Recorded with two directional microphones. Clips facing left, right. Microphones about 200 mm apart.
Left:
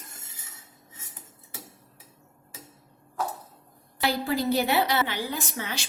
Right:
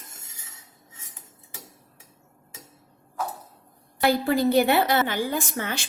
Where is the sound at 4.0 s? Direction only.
55° right (ahead or behind).